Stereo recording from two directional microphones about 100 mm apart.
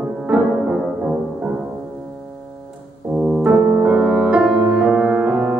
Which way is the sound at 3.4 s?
15° right (ahead or behind).